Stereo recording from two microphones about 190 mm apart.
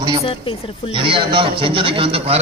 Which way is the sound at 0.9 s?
25° right (ahead or behind).